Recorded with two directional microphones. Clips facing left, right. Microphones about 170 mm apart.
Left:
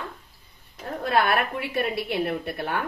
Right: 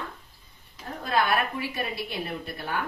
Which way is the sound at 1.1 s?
60° left (ahead or behind).